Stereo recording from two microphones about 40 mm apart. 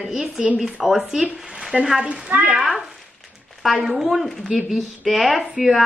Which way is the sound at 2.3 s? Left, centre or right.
Right.